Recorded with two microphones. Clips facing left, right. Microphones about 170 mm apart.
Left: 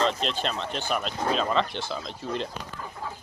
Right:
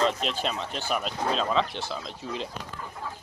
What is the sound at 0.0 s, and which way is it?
Speech, 5° right (ahead or behind).